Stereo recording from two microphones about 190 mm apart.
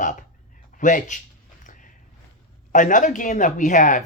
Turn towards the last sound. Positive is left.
turn(degrees=40)  # may be behind; listen again after turning